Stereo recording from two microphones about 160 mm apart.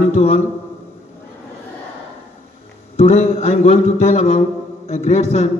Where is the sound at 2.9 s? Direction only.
40° left (ahead or behind).